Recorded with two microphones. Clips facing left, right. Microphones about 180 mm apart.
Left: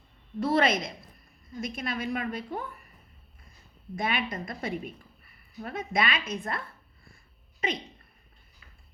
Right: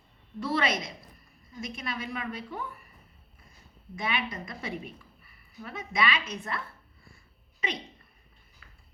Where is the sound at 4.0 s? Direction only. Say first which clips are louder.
Left 2 dB; 50° left (ahead or behind).